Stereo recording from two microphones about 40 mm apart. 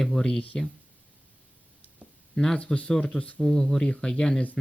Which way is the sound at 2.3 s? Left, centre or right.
Centre.